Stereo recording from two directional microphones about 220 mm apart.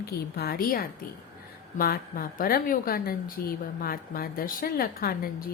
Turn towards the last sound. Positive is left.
turn(degrees=45)  # may be behind; listen again after turning